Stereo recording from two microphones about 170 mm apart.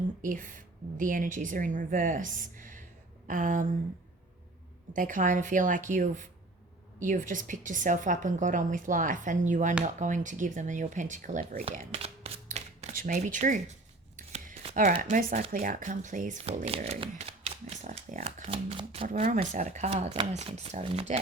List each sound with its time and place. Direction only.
0.2 s a woman's voice: 50° right (ahead or behind)
4.9 s a woman's voice: 50° right (ahead or behind)
11.9 s shuffling cards: 35° right (ahead or behind)
12.9 s speech: 50° right (ahead or behind)
14.2 s a sound: 45° right (ahead or behind)
15.1 s a woman's voice: 55° right (ahead or behind)